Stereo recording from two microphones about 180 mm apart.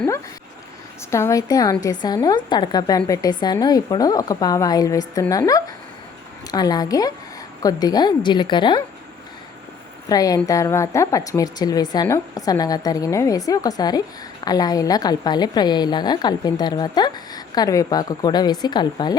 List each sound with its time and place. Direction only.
1.1 s a woman's voice: 15° left (ahead or behind)
10.1 s a woman's voice: 20° left (ahead or behind)